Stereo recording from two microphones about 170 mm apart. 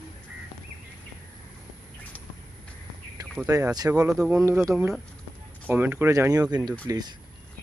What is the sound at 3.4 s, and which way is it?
Speech, 20° right (ahead or behind).